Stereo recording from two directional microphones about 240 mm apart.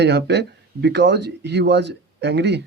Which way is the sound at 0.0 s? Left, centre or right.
Right.